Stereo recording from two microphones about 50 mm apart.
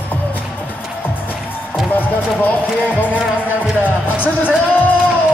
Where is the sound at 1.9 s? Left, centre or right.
Left.